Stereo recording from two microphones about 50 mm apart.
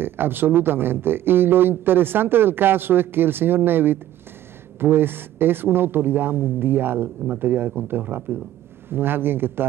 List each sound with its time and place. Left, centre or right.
0.0 s a man's voice: right